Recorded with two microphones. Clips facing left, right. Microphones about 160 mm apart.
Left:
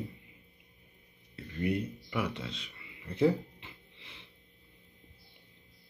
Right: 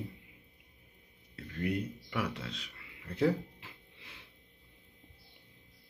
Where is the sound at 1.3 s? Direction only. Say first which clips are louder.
Left 2 dB; 5° left (ahead or behind).